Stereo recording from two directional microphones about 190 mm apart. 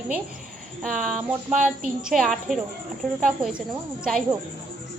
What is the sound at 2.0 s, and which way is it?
A woman's voice, centre (ahead or behind).